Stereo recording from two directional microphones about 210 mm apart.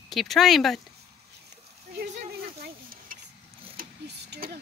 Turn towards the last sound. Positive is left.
turn(degrees=-40)  # may be behind; listen again after turning